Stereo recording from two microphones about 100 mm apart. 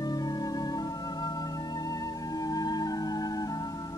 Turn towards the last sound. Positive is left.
turn(degrees=40)  # may be behind; listen again after turning